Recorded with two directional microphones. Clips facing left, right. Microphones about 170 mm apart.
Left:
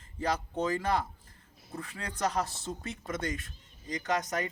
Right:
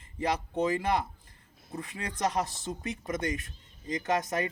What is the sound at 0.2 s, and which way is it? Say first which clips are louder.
A man's voice: right 2 dB; 10° right (ahead or behind).